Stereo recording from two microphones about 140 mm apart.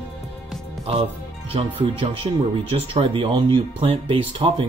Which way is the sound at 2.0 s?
45° right (ahead or behind).